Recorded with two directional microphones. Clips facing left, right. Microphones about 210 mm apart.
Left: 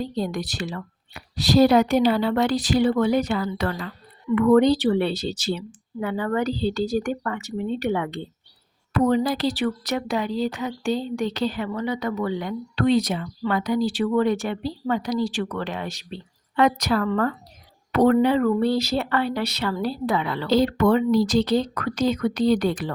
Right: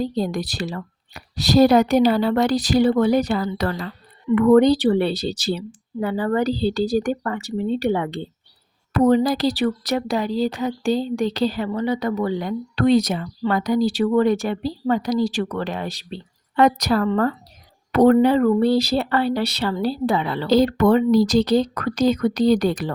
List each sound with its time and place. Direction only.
0.0 s speech: 35° right (ahead or behind)